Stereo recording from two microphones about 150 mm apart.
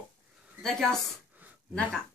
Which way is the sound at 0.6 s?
5° left (ahead or behind).